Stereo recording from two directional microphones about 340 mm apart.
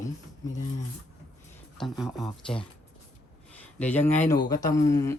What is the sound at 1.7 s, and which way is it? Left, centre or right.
Speech, centre.